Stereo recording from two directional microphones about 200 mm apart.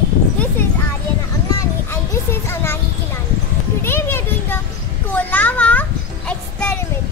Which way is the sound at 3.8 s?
10° left (ahead or behind).